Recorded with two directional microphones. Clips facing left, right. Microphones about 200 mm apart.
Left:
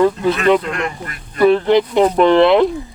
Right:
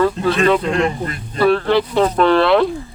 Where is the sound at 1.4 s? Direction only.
20° left (ahead or behind).